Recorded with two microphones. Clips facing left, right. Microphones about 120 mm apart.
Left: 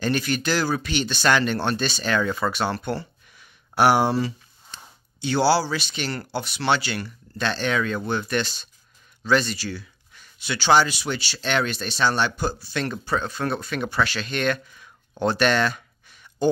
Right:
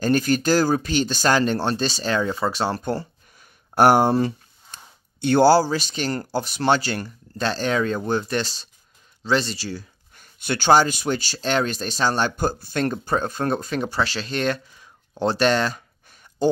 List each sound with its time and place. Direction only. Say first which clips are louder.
0.0 s speech: right 4 dB; 40° right (ahead or behind)
10.1 s speech: right 4 dB; 50° right (ahead or behind)